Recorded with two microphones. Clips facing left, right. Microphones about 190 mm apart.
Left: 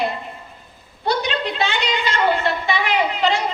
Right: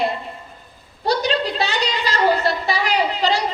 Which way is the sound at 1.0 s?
35° right (ahead or behind).